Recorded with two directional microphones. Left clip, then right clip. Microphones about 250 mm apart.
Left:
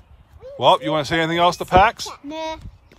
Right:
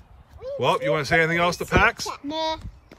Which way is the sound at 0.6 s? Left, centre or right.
Centre.